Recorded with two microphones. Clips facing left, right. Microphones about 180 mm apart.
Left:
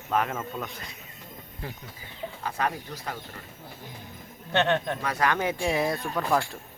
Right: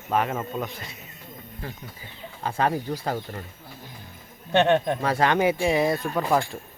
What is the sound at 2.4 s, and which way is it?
Speech, 30° right (ahead or behind).